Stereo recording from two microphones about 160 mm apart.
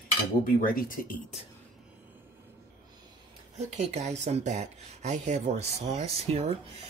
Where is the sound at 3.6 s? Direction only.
45° right (ahead or behind).